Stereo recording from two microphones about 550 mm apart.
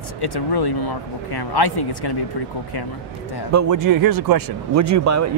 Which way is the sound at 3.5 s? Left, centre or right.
Right.